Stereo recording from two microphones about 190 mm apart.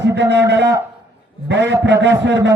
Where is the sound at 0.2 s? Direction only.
65° right (ahead or behind).